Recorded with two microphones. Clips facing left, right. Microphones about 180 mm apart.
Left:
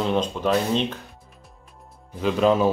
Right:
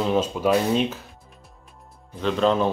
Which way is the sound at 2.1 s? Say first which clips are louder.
Left 1 dB; 10° left (ahead or behind).